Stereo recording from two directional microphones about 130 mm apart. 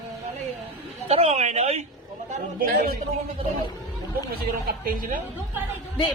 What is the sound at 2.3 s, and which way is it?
Speech, 90° right.